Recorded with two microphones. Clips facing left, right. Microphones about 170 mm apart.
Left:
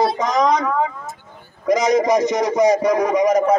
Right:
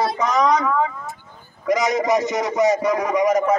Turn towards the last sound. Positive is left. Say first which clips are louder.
# left 3 dB
turn(degrees=20)  # may be behind; listen again after turning